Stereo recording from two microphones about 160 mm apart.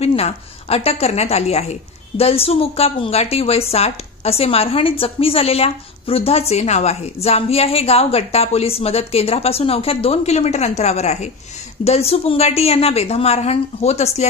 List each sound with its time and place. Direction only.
0.0 s a woman's voice: 40° left (ahead or behind)